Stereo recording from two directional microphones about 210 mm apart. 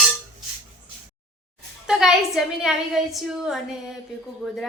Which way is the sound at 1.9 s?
Centre (ahead or behind).